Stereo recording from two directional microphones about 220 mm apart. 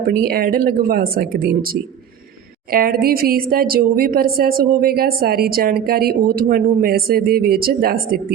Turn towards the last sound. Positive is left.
turn(degrees=-45)  # may be behind; listen again after turning